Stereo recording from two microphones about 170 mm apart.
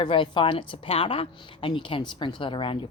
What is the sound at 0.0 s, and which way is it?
A woman's voice, 30° left (ahead or behind).